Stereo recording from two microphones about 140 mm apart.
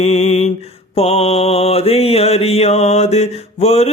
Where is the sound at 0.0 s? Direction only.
50° left (ahead or behind).